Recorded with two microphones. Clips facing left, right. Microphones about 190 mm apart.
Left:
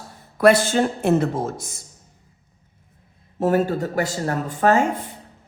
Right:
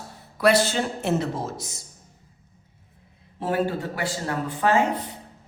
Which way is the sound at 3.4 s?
45° left (ahead or behind).